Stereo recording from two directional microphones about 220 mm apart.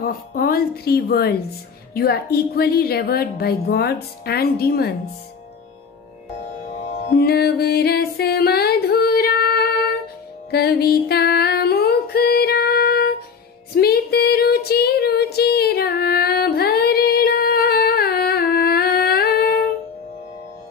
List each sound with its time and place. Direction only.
0.0 s a woman's voice: 40° left (ahead or behind)
7.2 s music: 45° left (ahead or behind)
10.5 s female singing: 45° left (ahead or behind)